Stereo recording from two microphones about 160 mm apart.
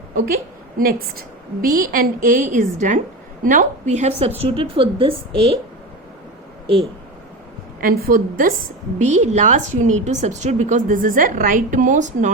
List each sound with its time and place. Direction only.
0.8 s a woman's voice: 65° right (ahead or behind); by 4.3 s 45° right (ahead or behind)
4.4 s speech: 35° right (ahead or behind)
7.8 s a woman's voice: 65° right (ahead or behind); by 12.3 s 50° right (ahead or behind)